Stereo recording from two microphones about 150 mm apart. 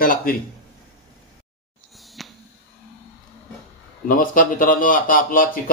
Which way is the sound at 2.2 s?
Centre (ahead or behind).